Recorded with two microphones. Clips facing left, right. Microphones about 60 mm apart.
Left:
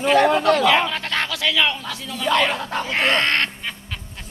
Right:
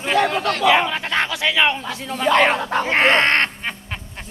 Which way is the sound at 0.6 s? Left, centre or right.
Centre.